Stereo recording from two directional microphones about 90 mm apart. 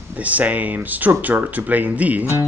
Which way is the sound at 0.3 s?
15° right (ahead or behind).